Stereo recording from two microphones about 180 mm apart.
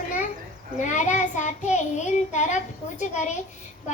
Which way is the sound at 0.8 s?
40° left (ahead or behind).